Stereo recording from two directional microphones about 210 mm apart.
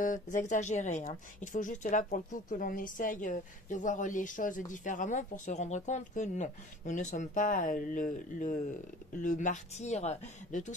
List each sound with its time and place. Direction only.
0.0 s speech: 40° left (ahead or behind)